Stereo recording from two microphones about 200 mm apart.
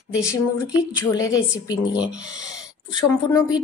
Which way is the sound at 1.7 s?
5° right (ahead or behind).